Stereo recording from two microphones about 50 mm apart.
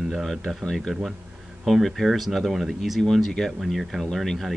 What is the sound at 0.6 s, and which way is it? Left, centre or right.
Speech, centre.